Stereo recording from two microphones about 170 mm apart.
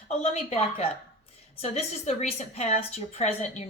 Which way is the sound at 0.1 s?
35° left (ahead or behind).